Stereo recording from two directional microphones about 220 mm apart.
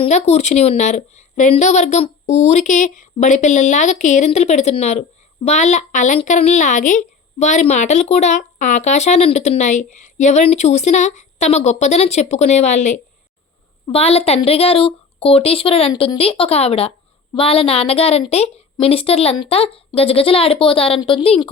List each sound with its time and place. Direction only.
0.0 s speech: 30° left (ahead or behind)